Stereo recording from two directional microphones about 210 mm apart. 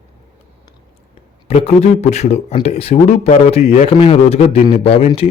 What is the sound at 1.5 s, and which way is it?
Speech, 30° left (ahead or behind).